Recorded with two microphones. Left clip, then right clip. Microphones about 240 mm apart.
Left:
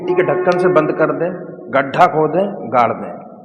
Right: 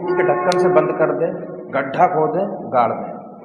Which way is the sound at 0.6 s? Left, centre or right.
Left.